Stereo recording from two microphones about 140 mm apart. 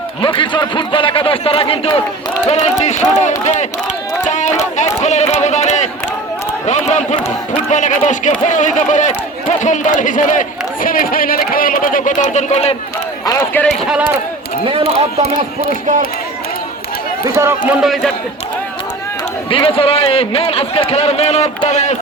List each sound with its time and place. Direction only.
0.2 s a man's voice: 35° left (ahead or behind)
2.5 s a man's voice: 55° left (ahead or behind)
4.2 s a sound: 60° left (ahead or behind)
4.9 s a man's voice: 55° left (ahead or behind)
10.8 s speech: 85° left; by 12.7 s 50° left (ahead or behind)
13.5 s speech: 10° left (ahead or behind)
17.2 s speech: 20° right (ahead or behind)
17.7 s a man's voice: centre (ahead or behind)
19.5 s a man's voice: 40° left (ahead or behind); by 21.9 s 55° left (ahead or behind)